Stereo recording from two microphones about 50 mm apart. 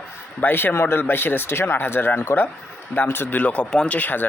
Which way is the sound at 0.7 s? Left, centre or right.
Left.